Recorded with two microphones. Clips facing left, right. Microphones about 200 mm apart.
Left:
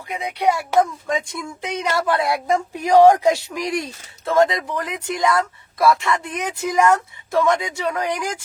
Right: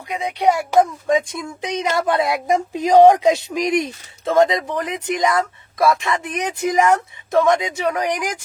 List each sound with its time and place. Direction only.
0.2 s speech: 20° right (ahead or behind)